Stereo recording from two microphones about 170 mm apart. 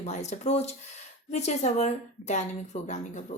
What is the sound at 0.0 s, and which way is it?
Speech, 40° left (ahead or behind).